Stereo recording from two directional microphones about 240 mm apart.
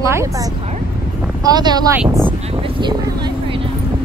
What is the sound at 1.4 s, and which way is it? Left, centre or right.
Speech, centre.